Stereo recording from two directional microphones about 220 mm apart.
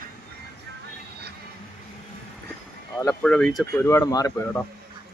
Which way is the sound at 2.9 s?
5° left (ahead or behind).